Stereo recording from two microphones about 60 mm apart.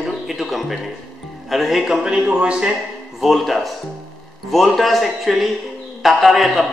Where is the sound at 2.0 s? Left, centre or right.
Centre.